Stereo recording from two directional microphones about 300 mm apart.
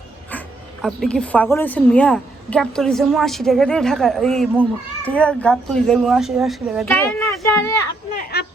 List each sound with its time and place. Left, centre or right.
0.3 s speech: centre
8.1 s speech: left